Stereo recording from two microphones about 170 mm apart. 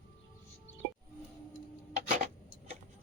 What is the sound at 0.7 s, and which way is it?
Music, 90° left.